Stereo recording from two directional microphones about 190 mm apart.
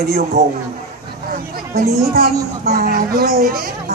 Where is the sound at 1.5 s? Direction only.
55° right (ahead or behind).